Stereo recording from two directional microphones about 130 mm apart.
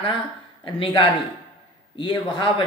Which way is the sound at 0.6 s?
40° left (ahead or behind).